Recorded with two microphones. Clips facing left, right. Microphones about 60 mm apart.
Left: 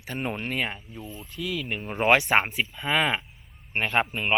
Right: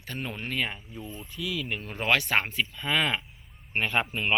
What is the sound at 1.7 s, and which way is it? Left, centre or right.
Speech, centre.